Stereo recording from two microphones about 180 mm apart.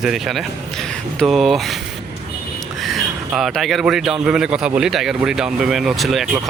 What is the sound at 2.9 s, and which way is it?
Speech, centre (ahead or behind).